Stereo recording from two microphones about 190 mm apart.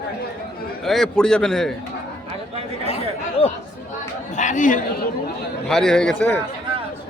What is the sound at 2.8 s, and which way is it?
Chatter, 30° left (ahead or behind).